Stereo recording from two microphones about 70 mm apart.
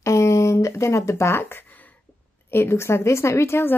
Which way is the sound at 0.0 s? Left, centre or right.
Left.